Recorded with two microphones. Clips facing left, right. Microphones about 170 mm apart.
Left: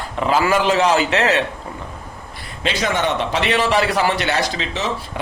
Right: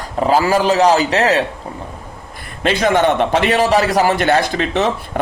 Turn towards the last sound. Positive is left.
turn(degrees=-55)  # may be behind; listen again after turning